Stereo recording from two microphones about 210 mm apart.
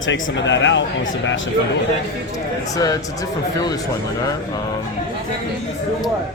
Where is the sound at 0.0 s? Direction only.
65° left (ahead or behind).